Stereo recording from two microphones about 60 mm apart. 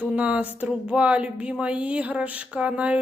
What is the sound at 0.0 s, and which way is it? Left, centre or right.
Speech, right.